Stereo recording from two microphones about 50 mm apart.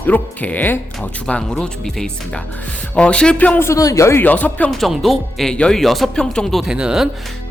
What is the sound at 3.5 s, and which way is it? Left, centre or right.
Speech, left.